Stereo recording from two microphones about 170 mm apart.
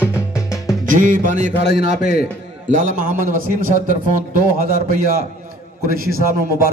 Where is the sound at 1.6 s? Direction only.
65° left (ahead or behind).